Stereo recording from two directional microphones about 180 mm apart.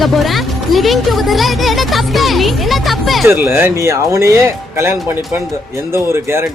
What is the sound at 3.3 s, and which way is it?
Speech, 10° right (ahead or behind).